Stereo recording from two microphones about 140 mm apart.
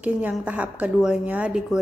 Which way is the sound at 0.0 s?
10° right (ahead or behind).